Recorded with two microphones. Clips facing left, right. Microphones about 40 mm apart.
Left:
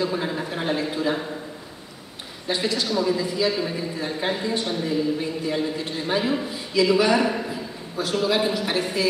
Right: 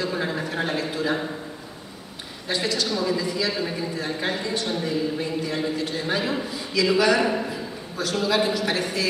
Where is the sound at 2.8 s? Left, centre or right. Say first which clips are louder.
Left 2 dB; centre.